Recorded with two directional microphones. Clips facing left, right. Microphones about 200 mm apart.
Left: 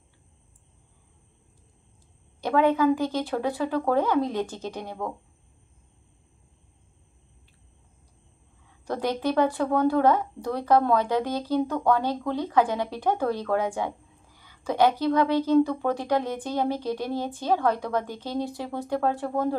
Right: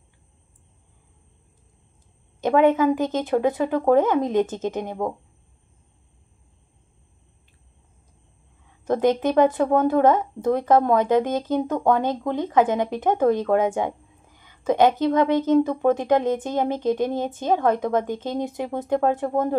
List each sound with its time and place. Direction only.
2.4 s a woman's voice: 20° right (ahead or behind)
8.8 s a woman's voice: 20° right (ahead or behind)